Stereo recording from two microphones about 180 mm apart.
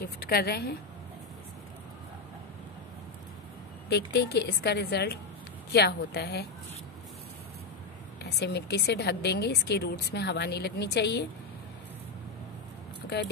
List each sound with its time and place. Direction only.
0.0 s a woman's voice: 60° left (ahead or behind)
3.9 s a woman's voice: 65° left (ahead or behind)
8.2 s a woman's voice: 65° left (ahead or behind)